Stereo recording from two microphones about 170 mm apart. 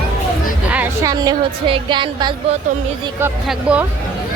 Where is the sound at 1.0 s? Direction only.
25° right (ahead or behind).